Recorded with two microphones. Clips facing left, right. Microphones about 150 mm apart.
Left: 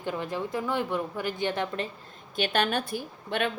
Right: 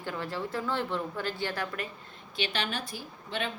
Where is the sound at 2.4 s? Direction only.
55° left (ahead or behind).